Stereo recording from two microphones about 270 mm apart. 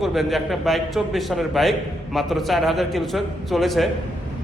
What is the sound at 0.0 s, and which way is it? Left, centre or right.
A man's voice, centre.